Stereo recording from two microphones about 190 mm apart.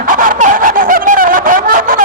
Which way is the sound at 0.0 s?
45° right (ahead or behind).